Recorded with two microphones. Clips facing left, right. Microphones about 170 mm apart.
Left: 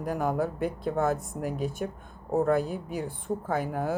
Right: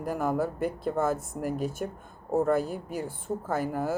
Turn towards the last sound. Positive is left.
turn(degrees=-5)  # may be behind; listen again after turning